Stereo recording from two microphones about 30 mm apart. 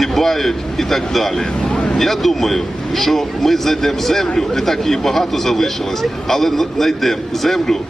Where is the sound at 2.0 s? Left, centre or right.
Centre.